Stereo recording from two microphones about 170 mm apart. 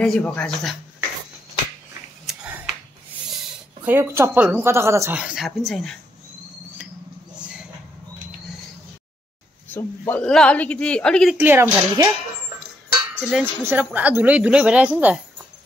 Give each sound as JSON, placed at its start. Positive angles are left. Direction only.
{"t": 0.0, "sound": "speech", "side_deg": 5}
{"t": 3.8, "sound": "speech", "side_deg": -15}
{"t": 7.3, "sound": "a sound", "side_deg": -5}
{"t": 9.8, "sound": "speech", "side_deg": 10}
{"t": 11.3, "sound": "speech", "side_deg": -10}
{"t": 13.3, "sound": "speech", "side_deg": -10}